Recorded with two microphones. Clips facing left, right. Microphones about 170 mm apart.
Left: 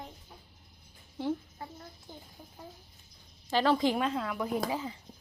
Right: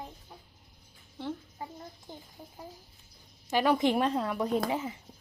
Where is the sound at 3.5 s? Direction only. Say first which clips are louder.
Right 1 dB; 15° right (ahead or behind).